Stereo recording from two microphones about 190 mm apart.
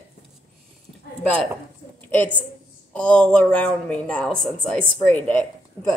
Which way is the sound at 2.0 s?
10° left (ahead or behind).